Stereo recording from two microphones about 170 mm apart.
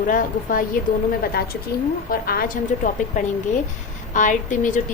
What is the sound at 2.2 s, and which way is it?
Speech, 60° left (ahead or behind).